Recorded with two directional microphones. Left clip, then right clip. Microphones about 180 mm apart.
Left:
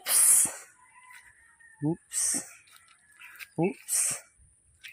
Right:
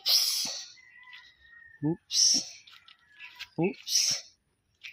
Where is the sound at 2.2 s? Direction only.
15° right (ahead or behind).